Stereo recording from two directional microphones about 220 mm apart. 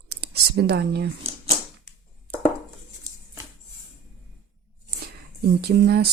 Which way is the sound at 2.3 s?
45° right (ahead or behind).